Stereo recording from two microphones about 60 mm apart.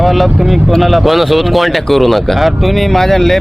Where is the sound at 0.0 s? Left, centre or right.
Centre.